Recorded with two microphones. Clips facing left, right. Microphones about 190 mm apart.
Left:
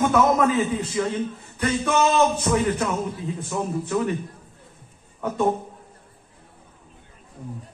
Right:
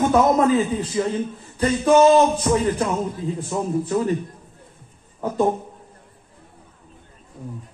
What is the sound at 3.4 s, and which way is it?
Speech, 30° right (ahead or behind).